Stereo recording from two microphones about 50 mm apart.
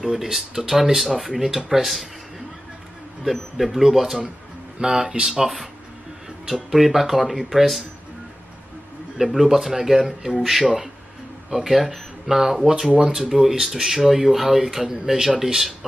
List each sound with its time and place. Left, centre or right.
0.0 s speech: centre
3.3 s speech: centre
4.7 s speech: centre
9.2 s speech: centre